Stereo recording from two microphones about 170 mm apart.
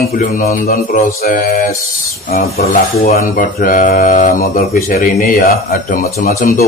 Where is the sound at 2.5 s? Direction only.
60° left (ahead or behind).